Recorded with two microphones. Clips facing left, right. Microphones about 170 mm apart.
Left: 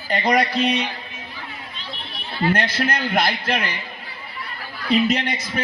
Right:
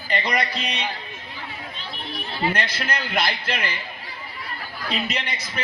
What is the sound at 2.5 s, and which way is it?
Speech, 50° left (ahead or behind).